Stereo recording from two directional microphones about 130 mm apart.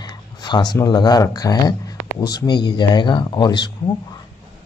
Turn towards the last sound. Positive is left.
turn(degrees=35)  # may be behind; listen again after turning